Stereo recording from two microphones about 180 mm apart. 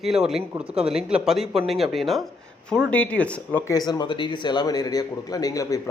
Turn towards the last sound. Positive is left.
turn(degrees=20)  # may be behind; listen again after turning